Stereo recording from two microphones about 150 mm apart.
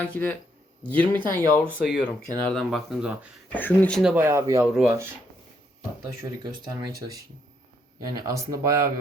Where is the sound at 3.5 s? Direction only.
10° left (ahead or behind).